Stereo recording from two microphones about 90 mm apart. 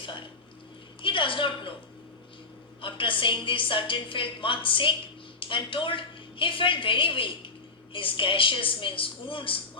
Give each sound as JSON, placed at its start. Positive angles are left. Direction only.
{"t": 1.0, "sound": "a woman's voice", "side_deg": 70}
{"t": 2.8, "sound": "a woman's voice", "side_deg": 70}